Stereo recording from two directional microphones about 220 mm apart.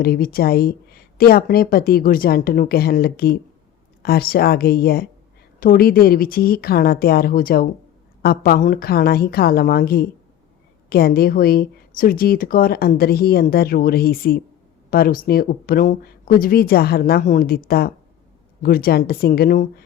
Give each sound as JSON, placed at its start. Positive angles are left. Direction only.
{"t": 0.0, "sound": "speech", "side_deg": 45}